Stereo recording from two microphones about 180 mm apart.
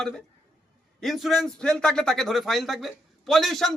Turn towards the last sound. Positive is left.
turn(degrees=0)  # may be behind; listen again after turning